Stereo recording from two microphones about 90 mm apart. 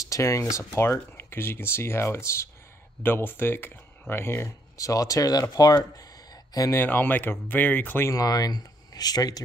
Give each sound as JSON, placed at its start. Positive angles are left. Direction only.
{"t": 0.0, "sound": "speech", "side_deg": 35}
{"t": 6.8, "sound": "speech", "side_deg": 20}
{"t": 8.1, "sound": "speech", "side_deg": 45}